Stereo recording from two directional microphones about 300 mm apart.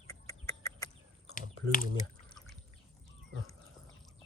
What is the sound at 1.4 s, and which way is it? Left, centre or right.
Speech, left.